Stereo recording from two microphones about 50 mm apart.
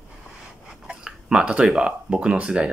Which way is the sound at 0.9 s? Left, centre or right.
Centre.